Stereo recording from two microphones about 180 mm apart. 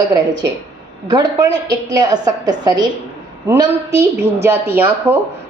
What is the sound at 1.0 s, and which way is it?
A woman's voice, 20° right (ahead or behind).